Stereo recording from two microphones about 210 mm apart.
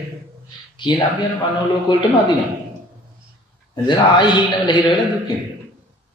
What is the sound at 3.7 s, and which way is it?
A man's voice, 20° left (ahead or behind).